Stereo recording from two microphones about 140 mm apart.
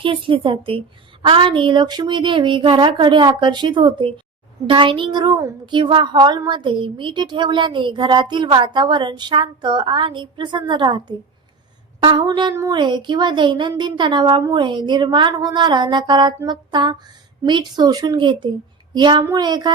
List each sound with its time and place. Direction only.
0.0 s speech: 40° right (ahead or behind)